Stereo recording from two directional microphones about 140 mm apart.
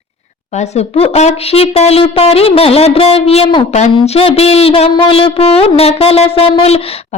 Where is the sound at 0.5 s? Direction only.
50° left (ahead or behind).